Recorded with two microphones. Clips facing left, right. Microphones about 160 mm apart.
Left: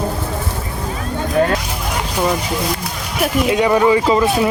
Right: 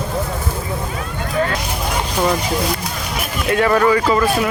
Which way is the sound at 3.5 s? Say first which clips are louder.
Even; 15° left (ahead or behind).